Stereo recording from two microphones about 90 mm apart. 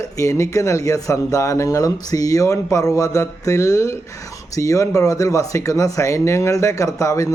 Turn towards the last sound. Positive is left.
turn(degrees=35)  # may be behind; listen again after turning